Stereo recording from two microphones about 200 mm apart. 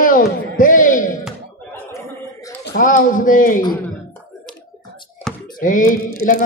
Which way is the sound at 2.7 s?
40° left (ahead or behind).